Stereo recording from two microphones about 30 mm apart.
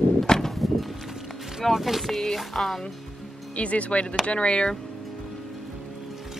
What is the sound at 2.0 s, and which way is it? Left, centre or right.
Speech, centre.